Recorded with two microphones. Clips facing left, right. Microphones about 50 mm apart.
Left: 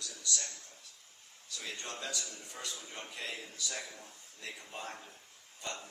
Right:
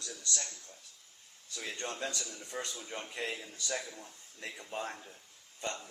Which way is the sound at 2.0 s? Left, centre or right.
Right.